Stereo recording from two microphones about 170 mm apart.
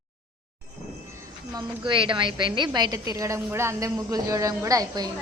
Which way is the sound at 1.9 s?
30° right (ahead or behind).